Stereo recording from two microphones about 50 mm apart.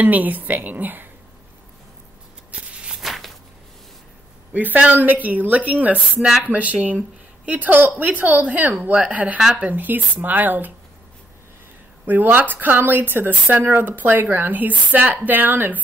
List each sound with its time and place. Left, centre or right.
0.0 s speech: right
2.5 s shuffling cards: right
3.0 s a sound: centre
4.6 s speech: right
12.1 s speech: right